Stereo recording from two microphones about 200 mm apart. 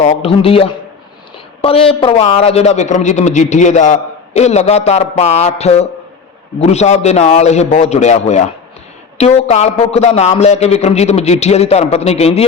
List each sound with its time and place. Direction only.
0.0 s a man's voice: 30° left (ahead or behind)